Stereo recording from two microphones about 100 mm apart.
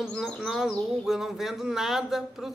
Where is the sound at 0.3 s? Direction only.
Centre (ahead or behind).